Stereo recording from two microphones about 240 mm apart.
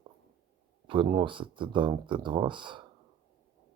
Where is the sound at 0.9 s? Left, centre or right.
Right.